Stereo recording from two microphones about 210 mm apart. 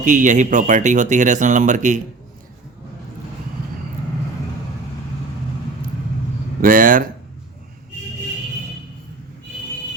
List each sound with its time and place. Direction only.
0.0 s speech: 35° right (ahead or behind)
6.6 s speech: 40° right (ahead or behind)